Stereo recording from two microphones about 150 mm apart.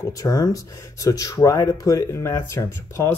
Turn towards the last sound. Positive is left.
turn(degrees=20)  # may be behind; listen again after turning